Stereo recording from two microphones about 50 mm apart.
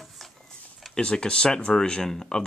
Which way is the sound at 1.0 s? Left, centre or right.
Centre.